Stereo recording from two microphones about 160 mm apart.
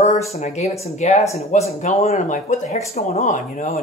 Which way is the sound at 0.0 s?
40° left (ahead or behind).